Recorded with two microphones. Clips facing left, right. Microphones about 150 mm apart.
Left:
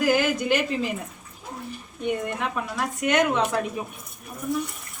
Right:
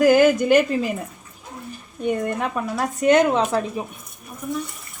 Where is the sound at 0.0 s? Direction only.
45° right (ahead or behind).